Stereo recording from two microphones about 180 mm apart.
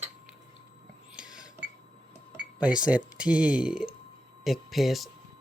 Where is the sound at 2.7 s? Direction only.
5° right (ahead or behind).